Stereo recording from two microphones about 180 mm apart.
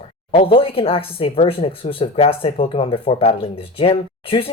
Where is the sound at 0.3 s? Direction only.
30° left (ahead or behind).